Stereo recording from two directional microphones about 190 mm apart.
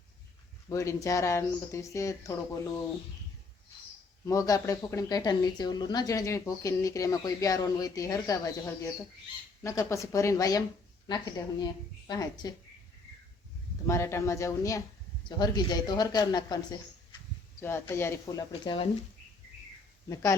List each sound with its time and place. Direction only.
0.7 s a woman's voice: 15° left (ahead or behind)
4.3 s a woman's voice: 20° left (ahead or behind)
13.8 s a woman's voice: 15° left (ahead or behind)